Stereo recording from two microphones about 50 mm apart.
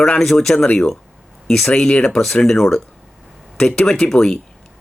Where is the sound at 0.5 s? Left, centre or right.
Left.